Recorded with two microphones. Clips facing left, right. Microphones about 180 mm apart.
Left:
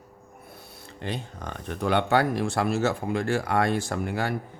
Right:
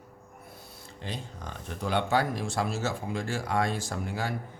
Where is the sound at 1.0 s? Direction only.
60° left (ahead or behind).